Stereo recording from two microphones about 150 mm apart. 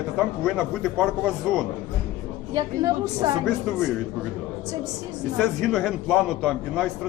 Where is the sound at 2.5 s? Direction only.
30° right (ahead or behind).